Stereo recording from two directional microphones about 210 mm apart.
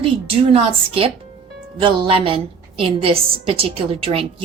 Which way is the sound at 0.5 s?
25° right (ahead or behind).